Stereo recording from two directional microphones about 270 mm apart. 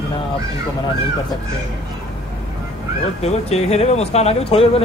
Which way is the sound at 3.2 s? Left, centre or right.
Left.